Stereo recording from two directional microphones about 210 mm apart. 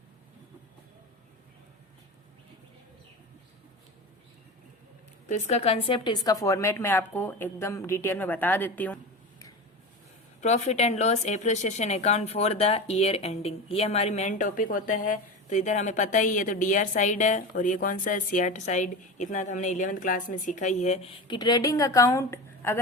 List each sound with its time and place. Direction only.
5.3 s a woman's voice: 35° left (ahead or behind); by 9.0 s 5° left (ahead or behind)
10.4 s speech: 30° left (ahead or behind); by 22.8 s 10° left (ahead or behind)